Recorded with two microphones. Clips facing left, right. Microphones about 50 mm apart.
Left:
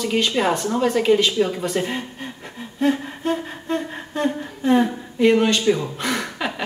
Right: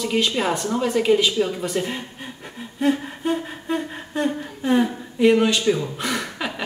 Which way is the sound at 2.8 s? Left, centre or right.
Centre.